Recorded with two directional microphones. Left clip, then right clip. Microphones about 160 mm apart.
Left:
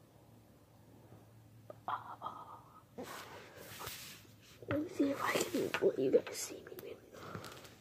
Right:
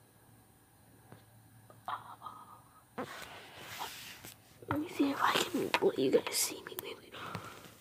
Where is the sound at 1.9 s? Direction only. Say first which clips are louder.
Even; centre (ahead or behind).